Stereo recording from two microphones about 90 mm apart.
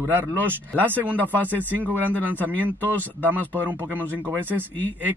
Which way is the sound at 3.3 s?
20° right (ahead or behind).